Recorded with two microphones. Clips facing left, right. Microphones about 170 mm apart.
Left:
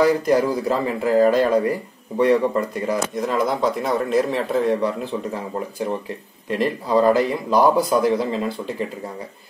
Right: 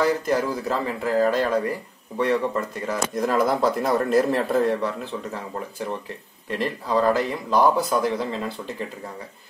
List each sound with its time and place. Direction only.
0.0 s speech: 10° left (ahead or behind)
3.2 s a man's voice: centre (ahead or behind)
4.6 s speech: 10° left (ahead or behind)